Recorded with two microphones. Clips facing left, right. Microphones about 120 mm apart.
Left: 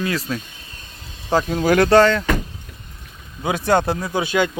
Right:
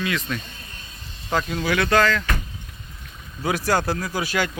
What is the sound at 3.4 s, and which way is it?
Speech, 20° left (ahead or behind).